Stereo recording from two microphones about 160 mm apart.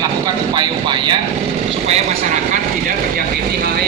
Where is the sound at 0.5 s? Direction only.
30° right (ahead or behind).